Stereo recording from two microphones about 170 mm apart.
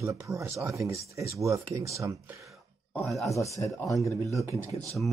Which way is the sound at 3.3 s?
20° left (ahead or behind).